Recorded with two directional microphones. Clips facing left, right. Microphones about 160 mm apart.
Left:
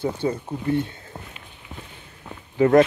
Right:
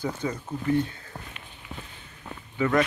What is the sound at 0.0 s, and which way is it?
Speech, 30° left (ahead or behind).